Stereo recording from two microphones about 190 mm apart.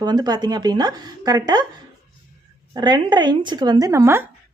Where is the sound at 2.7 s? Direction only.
25° right (ahead or behind).